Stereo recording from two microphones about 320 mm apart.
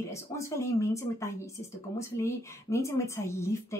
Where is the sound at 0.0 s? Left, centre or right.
Centre.